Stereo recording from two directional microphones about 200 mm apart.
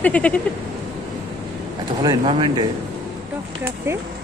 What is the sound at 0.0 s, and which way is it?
Bleat, 5° left (ahead or behind).